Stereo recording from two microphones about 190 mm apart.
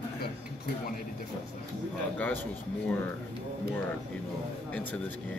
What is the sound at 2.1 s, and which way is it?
Speech, 10° left (ahead or behind).